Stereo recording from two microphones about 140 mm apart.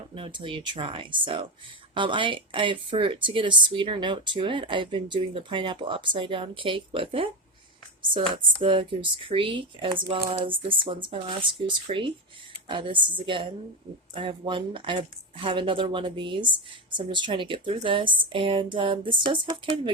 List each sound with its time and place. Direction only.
0.1 s speech: 35° right (ahead or behind)
8.6 s speech: 35° right (ahead or behind)